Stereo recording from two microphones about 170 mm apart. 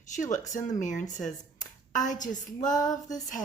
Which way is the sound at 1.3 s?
50° left (ahead or behind).